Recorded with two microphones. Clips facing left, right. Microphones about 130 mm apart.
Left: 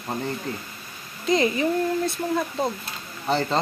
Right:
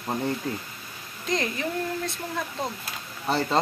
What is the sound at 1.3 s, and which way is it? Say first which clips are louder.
Speech: left 7 dB; 5° left (ahead or behind).